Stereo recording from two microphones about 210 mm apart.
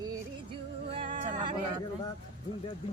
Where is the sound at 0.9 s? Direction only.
30° right (ahead or behind).